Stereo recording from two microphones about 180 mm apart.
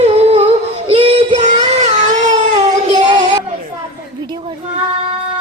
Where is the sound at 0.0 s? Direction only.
35° right (ahead or behind).